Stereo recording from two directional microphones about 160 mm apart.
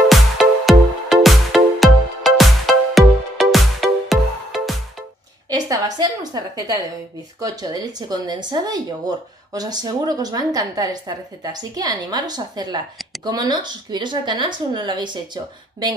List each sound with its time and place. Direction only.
0.1 s music: centre (ahead or behind)
5.5 s a woman's voice: 25° right (ahead or behind)